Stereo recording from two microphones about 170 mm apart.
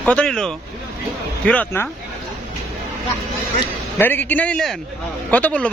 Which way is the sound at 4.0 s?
10° left (ahead or behind).